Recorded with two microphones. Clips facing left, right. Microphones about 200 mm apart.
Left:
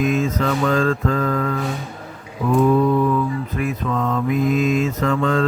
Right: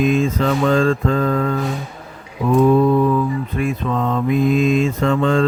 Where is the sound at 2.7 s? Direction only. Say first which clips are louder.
Right 2 dB; 30° right (ahead or behind).